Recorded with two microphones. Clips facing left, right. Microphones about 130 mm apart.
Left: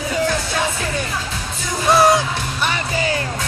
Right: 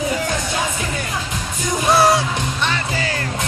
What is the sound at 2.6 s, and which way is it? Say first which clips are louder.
Music: left 2 dB; 20° left (ahead or behind).